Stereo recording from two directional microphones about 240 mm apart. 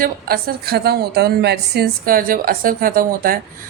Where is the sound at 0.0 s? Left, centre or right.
Right.